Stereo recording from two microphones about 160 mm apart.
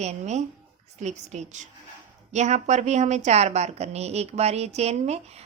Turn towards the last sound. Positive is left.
turn(degrees=-40)  # may be behind; listen again after turning